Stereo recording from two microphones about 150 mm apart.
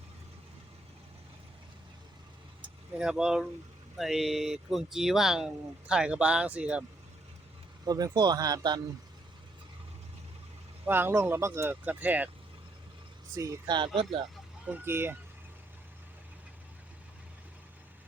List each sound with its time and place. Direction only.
3.0 s speech: 5° right (ahead or behind)
7.9 s speech: 25° right (ahead or behind)
10.8 s speech: 15° right (ahead or behind)
13.3 s speech: 20° right (ahead or behind)
14.7 s speech: 15° right (ahead or behind)